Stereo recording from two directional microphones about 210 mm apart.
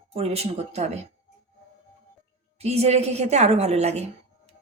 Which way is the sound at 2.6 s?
30° right (ahead or behind).